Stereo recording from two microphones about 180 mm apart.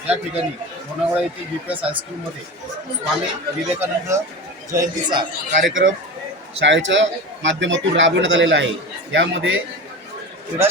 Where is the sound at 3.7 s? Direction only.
15° right (ahead or behind).